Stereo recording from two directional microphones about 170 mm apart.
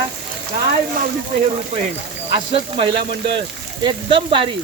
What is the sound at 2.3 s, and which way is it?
Speech, 30° right (ahead or behind).